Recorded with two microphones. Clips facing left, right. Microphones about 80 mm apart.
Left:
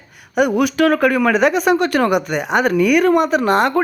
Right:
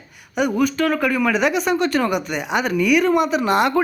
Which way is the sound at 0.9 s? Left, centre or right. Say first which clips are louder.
Left 4 dB; left.